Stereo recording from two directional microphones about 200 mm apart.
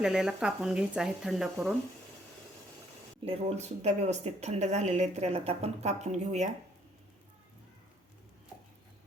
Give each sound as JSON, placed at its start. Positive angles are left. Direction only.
{"t": 0.0, "sound": "speech", "side_deg": -5}
{"t": 3.2, "sound": "a woman's voice", "side_deg": -35}